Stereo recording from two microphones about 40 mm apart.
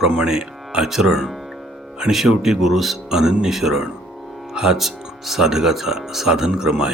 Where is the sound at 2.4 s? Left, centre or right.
Centre.